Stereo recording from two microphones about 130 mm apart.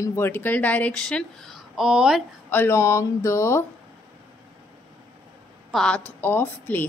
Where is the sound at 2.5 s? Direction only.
20° left (ahead or behind).